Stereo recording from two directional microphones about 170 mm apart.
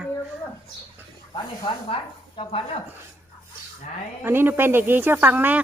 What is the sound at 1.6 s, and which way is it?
Speech, 30° left (ahead or behind).